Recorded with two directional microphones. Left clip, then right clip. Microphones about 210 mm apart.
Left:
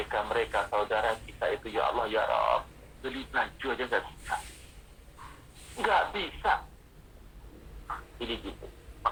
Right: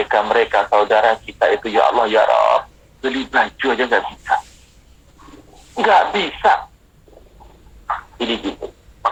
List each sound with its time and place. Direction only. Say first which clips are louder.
0.0 s speech: right 15 dB; 45° right (ahead or behind)
5.7 s speech: right 14 dB; 45° right (ahead or behind)
7.9 s a sound: right 15 dB; 45° right (ahead or behind)